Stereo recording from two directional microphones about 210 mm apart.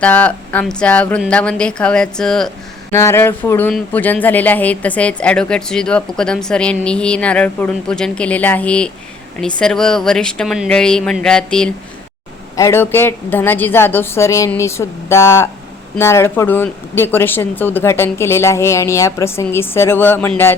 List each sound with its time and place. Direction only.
0.0 s speech: 5° left (ahead or behind)